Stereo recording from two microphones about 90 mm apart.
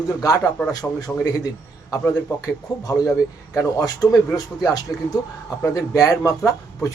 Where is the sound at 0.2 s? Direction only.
40° left (ahead or behind).